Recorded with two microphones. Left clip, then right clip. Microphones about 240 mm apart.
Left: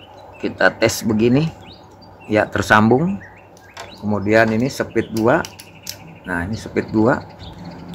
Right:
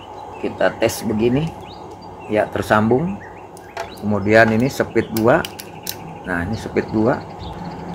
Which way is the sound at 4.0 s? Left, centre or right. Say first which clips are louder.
Right 2 dB; centre.